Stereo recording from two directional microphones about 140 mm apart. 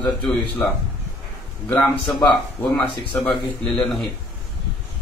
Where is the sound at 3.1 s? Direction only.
5° left (ahead or behind).